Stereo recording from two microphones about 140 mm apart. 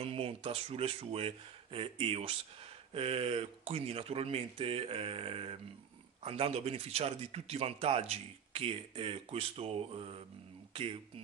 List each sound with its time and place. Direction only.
0.0 s speech: 40° right (ahead or behind)